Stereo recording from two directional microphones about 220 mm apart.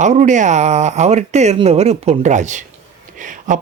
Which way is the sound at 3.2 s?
35° right (ahead or behind).